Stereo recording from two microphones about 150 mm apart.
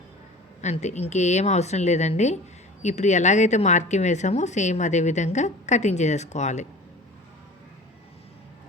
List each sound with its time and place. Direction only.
0.6 s speech: 50° left (ahead or behind)